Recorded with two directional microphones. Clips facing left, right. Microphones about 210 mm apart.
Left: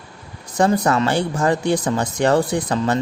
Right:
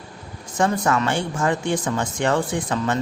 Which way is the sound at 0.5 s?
35° left (ahead or behind).